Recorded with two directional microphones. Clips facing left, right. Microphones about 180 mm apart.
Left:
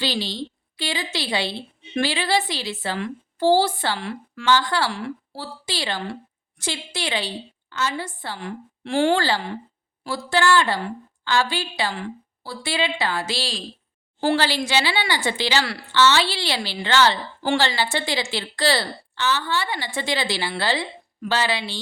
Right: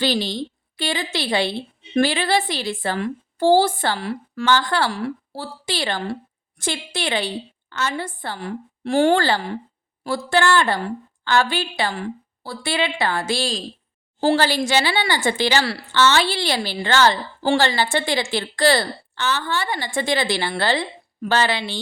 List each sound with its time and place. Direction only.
0.0 s speech: 50° right (ahead or behind)
4.5 s a woman's voice: 55° right (ahead or behind)
8.4 s a woman's voice: 40° right (ahead or behind)
17.7 s speech: 50° right (ahead or behind)